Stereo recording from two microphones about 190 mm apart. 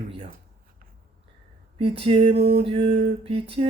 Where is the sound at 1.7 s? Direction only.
30° right (ahead or behind).